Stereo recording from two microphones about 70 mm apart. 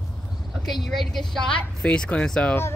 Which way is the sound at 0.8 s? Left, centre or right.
Centre.